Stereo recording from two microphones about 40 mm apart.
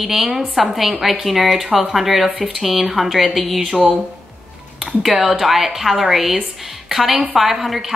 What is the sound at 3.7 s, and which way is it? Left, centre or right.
Speech, centre.